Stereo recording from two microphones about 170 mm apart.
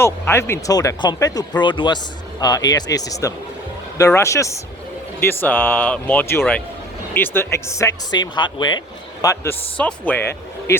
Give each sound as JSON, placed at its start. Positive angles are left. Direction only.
{"t": 0.0, "sound": "speech", "side_deg": 15}
{"t": 9.2, "sound": "speech", "side_deg": 15}